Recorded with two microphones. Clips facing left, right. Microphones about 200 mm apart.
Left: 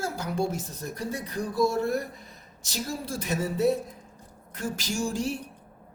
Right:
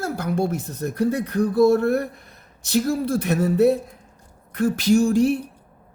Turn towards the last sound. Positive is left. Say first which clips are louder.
# right 12 dB
turn(degrees=-60)  # may be behind; listen again after turning